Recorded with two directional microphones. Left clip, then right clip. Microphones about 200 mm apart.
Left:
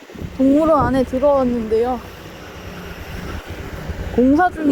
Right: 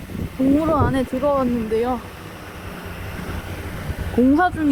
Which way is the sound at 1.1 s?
15° right (ahead or behind).